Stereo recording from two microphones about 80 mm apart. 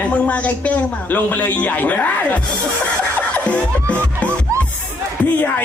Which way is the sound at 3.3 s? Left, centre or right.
Centre.